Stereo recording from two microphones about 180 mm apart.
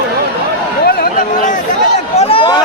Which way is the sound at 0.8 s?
60° left (ahead or behind).